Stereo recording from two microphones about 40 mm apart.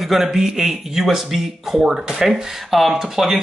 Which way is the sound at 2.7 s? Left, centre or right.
Centre.